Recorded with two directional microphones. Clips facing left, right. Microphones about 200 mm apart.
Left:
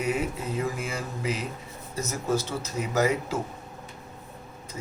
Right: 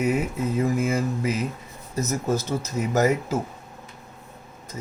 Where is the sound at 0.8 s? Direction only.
45° right (ahead or behind).